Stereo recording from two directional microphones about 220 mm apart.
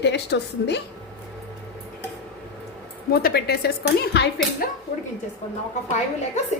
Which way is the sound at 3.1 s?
45° left (ahead or behind).